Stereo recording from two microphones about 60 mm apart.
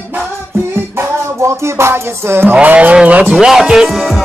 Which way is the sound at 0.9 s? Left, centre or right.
Right.